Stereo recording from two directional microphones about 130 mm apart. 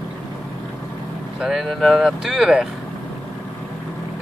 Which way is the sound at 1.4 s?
Centre (ahead or behind).